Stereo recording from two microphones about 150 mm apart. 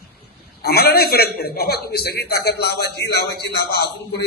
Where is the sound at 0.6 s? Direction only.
90° left.